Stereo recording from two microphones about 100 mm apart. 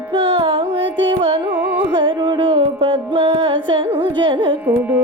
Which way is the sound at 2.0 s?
50° right (ahead or behind).